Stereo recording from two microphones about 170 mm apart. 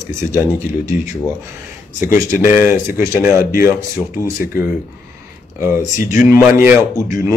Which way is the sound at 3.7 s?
15° right (ahead or behind).